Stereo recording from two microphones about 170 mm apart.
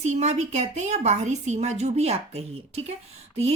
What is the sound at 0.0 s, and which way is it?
Speech, 40° right (ahead or behind).